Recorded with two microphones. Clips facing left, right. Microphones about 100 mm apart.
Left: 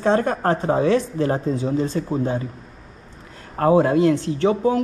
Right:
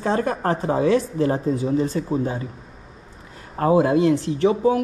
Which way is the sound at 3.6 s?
45° left (ahead or behind).